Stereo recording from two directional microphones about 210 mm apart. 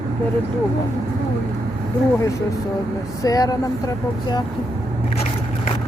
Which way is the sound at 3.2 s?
15° left (ahead or behind).